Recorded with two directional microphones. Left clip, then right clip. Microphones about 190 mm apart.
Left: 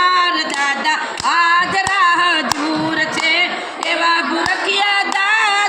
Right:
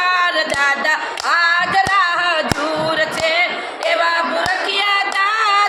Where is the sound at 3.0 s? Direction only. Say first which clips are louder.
Left 2 dB; 15° right (ahead or behind).